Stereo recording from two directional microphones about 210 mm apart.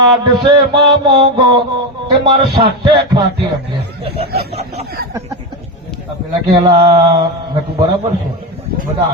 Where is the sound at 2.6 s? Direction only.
20° right (ahead or behind).